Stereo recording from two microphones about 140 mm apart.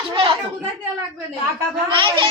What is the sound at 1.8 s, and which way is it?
Speech, 35° right (ahead or behind).